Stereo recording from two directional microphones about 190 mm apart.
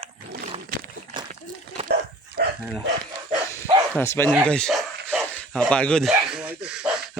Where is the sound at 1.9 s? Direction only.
60° right (ahead or behind).